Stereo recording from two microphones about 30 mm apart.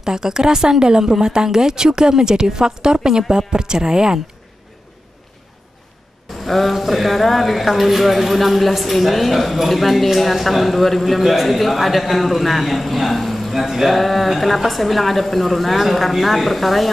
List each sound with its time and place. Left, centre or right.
0.0 s a woman's voice: right
6.4 s speech: centre